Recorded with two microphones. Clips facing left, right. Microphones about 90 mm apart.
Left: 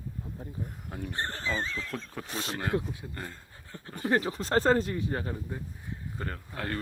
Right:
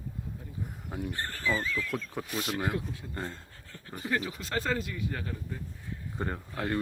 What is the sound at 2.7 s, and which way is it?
Speech, 20° left (ahead or behind).